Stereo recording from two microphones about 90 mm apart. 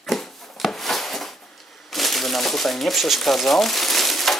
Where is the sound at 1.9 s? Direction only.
Centre (ahead or behind).